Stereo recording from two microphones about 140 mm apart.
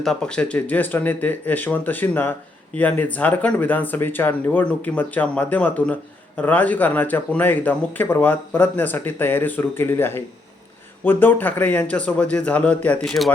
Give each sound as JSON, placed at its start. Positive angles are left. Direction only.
{"t": 0.0, "sound": "speech", "side_deg": 5}